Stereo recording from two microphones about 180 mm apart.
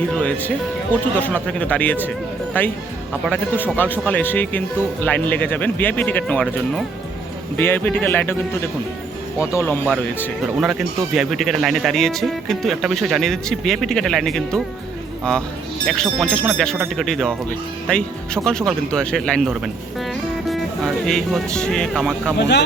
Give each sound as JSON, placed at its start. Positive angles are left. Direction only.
{"t": 0.1, "sound": "speech", "side_deg": 10}
{"t": 10.6, "sound": "speech", "side_deg": 0}
{"t": 22.4, "sound": "speech", "side_deg": 70}